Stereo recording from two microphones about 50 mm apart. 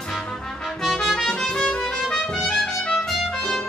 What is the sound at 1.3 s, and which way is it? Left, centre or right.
Music, centre.